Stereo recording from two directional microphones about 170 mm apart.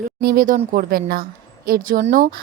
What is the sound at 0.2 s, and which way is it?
A woman's voice, 60° right (ahead or behind).